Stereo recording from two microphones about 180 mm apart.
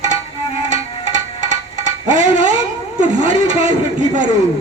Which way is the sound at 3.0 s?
40° right (ahead or behind).